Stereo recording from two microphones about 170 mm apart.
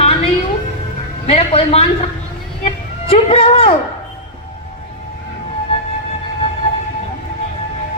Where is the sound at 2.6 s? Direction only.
35° left (ahead or behind).